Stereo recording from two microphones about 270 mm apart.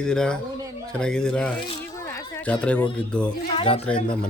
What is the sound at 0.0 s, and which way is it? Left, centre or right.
A man's voice, centre.